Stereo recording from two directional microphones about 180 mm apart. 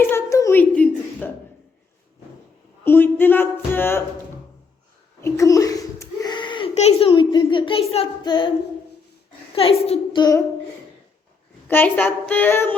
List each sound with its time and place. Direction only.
0.1 s a sound: 15° left (ahead or behind)
2.8 s music: 10° left (ahead or behind)
5.2 s a sound: 20° left (ahead or behind)
6.7 s speech: 35° left (ahead or behind)
9.6 s speech: 35° left (ahead or behind)
11.7 s music: 10° left (ahead or behind)